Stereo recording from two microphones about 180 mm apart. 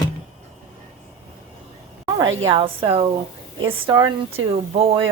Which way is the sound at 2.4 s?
30° right (ahead or behind).